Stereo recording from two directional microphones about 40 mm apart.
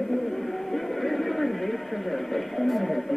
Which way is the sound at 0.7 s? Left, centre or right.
Centre.